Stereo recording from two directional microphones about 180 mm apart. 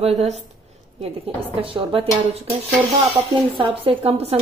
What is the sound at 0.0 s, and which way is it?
Speech, 35° right (ahead or behind).